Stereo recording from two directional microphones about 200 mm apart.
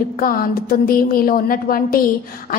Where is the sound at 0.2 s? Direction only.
45° left (ahead or behind).